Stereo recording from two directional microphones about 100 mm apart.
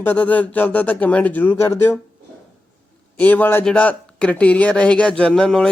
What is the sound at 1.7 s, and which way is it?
Speech, 25° left (ahead or behind).